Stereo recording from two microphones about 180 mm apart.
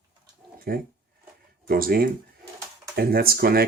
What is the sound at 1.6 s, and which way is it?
Speech, 55° right (ahead or behind).